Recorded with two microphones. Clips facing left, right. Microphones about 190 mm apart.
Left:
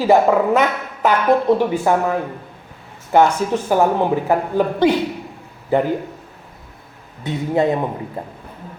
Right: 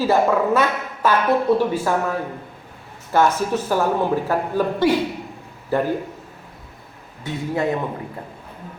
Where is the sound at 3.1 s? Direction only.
20° left (ahead or behind).